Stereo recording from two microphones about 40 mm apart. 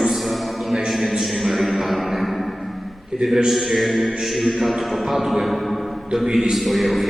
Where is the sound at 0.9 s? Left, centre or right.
Centre.